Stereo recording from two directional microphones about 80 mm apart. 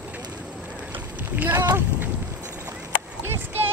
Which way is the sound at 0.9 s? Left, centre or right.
Right.